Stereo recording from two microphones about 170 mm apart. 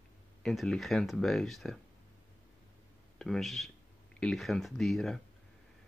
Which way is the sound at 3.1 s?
Centre (ahead or behind).